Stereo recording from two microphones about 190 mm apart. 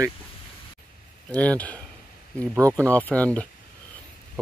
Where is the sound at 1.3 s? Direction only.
5° left (ahead or behind).